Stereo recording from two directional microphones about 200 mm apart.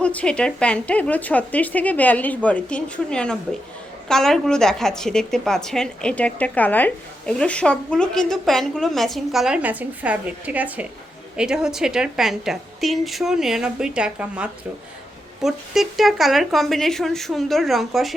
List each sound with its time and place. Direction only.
0.0 s a woman's voice: 5° left (ahead or behind)